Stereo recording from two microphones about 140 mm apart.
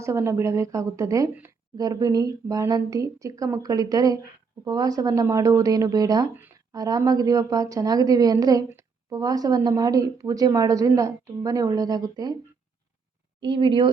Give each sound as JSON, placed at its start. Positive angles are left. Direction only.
{"t": 0.0, "sound": "a woman's voice", "side_deg": -20}
{"t": 6.3, "sound": "a sound", "side_deg": -15}
{"t": 6.7, "sound": "a woman's voice", "side_deg": -25}
{"t": 13.4, "sound": "speech", "side_deg": -35}